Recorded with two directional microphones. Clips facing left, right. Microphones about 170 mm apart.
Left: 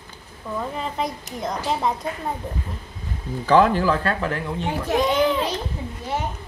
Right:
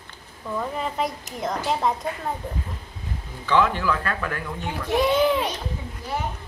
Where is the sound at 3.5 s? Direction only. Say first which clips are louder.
Left 5 dB; 40° left (ahead or behind).